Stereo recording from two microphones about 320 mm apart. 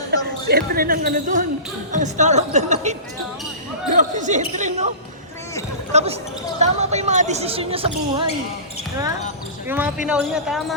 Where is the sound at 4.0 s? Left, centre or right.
Right.